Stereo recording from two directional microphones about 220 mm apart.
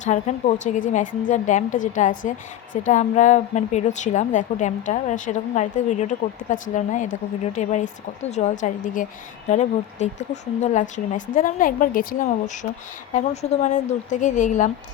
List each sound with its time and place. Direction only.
0.0 s a woman's voice: 35° left (ahead or behind)